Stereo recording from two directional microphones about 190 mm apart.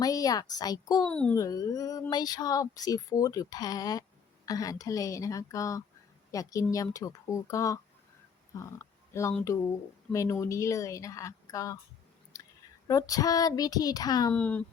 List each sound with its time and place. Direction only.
0.0 s a woman's voice: 20° left (ahead or behind)
1.0 s speech: 5° left (ahead or behind)
1.4 s a sound: 20° left (ahead or behind)
4.4 s a woman's voice: 20° left (ahead or behind)
12.9 s a sound: 20° left (ahead or behind)
14.3 s a woman's voice: 5° left (ahead or behind)